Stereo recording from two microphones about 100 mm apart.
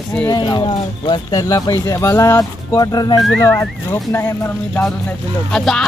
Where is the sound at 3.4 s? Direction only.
30° left (ahead or behind).